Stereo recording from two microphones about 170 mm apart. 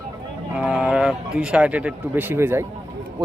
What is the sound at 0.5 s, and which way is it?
Speech, 5° right (ahead or behind).